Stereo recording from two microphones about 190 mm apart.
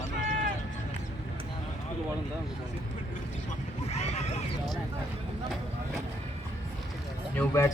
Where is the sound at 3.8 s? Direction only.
35° left (ahead or behind).